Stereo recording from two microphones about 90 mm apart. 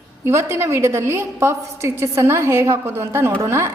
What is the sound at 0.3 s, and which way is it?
A woman's voice, 30° right (ahead or behind).